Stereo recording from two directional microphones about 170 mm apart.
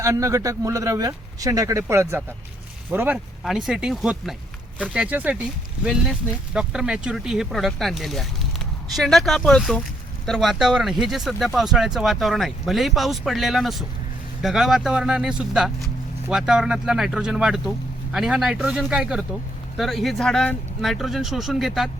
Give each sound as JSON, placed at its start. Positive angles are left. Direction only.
{"t": 0.0, "sound": "speech", "side_deg": -20}